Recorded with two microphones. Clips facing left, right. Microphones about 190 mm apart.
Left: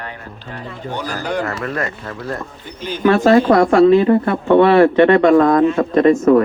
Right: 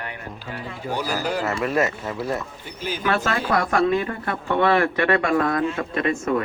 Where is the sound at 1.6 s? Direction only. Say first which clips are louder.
Right 1 dB; 25° right (ahead or behind).